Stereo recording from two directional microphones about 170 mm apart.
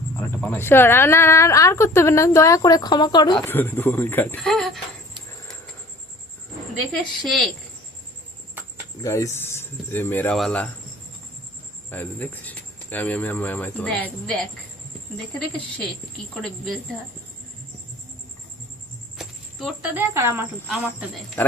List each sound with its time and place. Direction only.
0.2 s speech: 10° left (ahead or behind)
3.4 s speech: 10° left (ahead or behind)
4.5 s a woman's voice: centre (ahead or behind)
6.9 s a woman's voice: centre (ahead or behind)
9.0 s a woman's voice: 20° left (ahead or behind); by 10.7 s 5° left (ahead or behind)
11.9 s speech: 10° left (ahead or behind)
16.3 s a woman's voice: 5° left (ahead or behind)
19.1 s a sound: centre (ahead or behind)
19.9 s speech: 15° right (ahead or behind)
21.4 s speech: 10° left (ahead or behind)